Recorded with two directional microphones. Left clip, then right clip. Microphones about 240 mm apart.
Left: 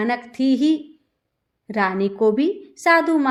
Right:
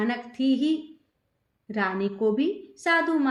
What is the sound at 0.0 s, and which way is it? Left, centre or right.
A woman's voice, left.